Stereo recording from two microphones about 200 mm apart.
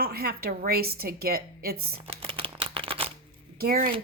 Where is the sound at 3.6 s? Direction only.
45° right (ahead or behind).